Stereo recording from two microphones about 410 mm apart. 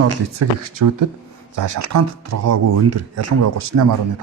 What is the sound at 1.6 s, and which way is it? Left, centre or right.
Speech, right.